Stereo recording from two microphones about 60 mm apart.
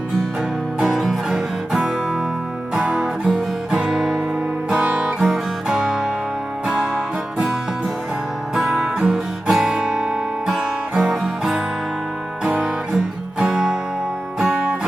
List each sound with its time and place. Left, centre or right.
0.8 s music: centre
4.7 s guitar: centre
5.2 s music: centre
8.5 s music: centre
12.5 s music: right
13.4 s music: centre